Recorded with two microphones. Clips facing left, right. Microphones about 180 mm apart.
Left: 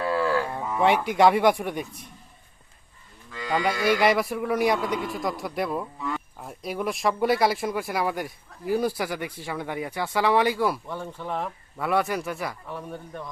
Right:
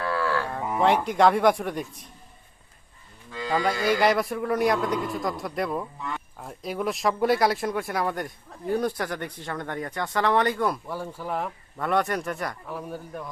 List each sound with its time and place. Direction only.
0.0 s cattle: 20° left (ahead or behind)
0.8 s speech: 5° left (ahead or behind)
3.5 s speech: centre (ahead or behind)